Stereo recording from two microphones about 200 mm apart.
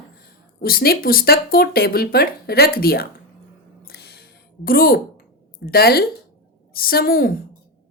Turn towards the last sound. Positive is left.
turn(degrees=45)  # may be behind; listen again after turning